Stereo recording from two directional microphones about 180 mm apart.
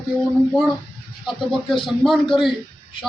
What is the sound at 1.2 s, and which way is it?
Speech, centre (ahead or behind).